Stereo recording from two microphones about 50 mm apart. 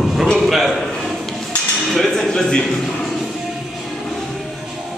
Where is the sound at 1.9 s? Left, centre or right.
Centre.